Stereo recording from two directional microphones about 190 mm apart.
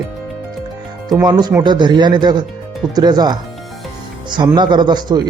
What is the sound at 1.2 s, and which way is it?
Speech, 20° right (ahead or behind).